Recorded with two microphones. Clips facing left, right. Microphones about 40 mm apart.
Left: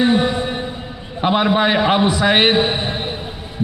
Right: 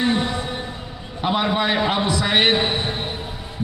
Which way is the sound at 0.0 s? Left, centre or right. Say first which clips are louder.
Left 5 dB; left.